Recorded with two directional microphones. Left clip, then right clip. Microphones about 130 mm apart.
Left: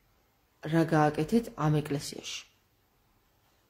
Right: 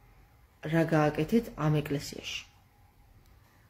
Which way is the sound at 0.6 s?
20° left (ahead or behind).